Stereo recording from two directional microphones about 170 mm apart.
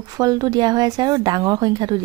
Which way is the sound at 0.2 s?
20° right (ahead or behind).